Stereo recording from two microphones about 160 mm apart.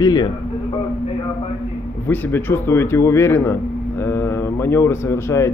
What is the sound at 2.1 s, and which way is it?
Speech, 15° left (ahead or behind).